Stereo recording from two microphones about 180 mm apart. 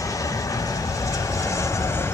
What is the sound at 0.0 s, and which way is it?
Vehicle, 20° left (ahead or behind).